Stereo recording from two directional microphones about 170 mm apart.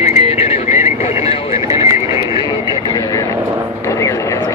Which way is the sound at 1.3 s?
35° left (ahead or behind).